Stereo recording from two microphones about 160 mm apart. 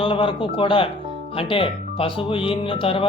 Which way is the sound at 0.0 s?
35° left (ahead or behind).